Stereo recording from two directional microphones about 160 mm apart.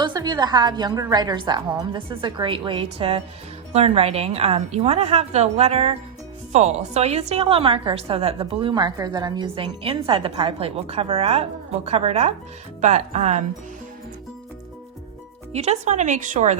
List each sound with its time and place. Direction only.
0.0 s a woman's voice: 25° right (ahead or behind); by 13.4 s 45° right (ahead or behind)
15.5 s speech: 45° right (ahead or behind)